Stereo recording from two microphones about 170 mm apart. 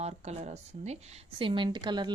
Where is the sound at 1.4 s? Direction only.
30° right (ahead or behind).